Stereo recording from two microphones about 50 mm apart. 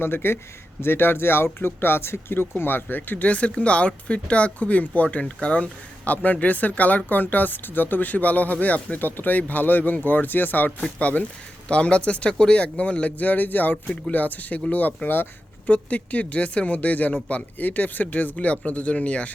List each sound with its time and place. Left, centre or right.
0.0 s speech: left